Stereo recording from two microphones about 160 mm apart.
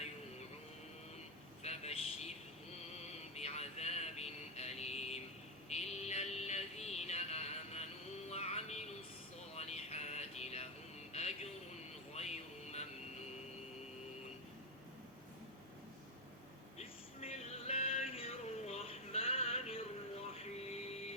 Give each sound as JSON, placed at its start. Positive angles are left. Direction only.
{"t": 1.6, "sound": "vehicle", "side_deg": 40}
{"t": 3.1, "sound": "a sound", "side_deg": 45}
{"t": 5.6, "sound": "music", "side_deg": 45}
{"t": 11.1, "sound": "a sound", "side_deg": 40}
{"t": 12.1, "sound": "music", "side_deg": 45}
{"t": 16.7, "sound": "vehicle", "side_deg": 40}
{"t": 18.1, "sound": "music", "side_deg": 40}